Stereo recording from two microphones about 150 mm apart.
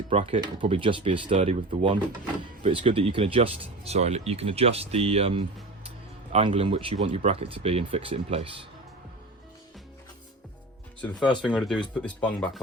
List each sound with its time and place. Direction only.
0.1 s speech: 50° right (ahead or behind)
0.6 s speech: 35° right (ahead or behind)
11.0 s speech: 10° left (ahead or behind)